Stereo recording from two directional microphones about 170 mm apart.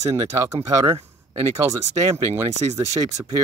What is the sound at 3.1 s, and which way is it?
Speech, 20° right (ahead or behind).